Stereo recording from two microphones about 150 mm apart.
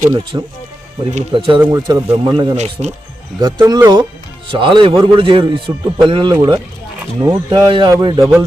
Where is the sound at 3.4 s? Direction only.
30° right (ahead or behind).